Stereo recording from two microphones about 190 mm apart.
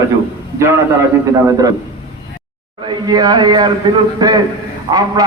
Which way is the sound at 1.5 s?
20° right (ahead or behind).